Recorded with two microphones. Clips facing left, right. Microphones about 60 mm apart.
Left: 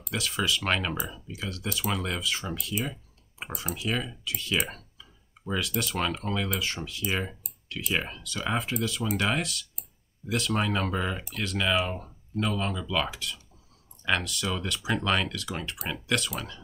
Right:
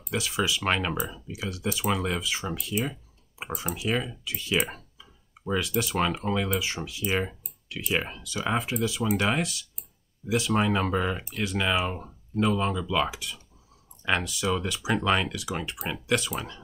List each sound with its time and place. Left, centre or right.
0.1 s speech: centre
4.9 s tick-tock: centre
5.6 s speech: centre